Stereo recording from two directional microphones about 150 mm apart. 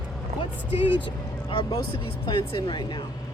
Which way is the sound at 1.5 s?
35° left (ahead or behind).